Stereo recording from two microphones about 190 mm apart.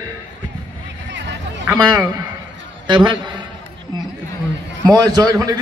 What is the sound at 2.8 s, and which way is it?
Speech, 25° right (ahead or behind).